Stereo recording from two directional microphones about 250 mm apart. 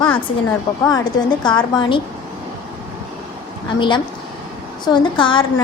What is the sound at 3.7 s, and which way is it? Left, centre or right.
Speech, centre.